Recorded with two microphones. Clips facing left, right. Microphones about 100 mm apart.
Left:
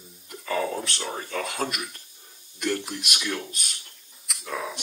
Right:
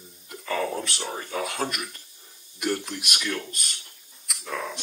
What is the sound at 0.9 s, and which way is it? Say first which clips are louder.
Speech: even; 15° right (ahead or behind).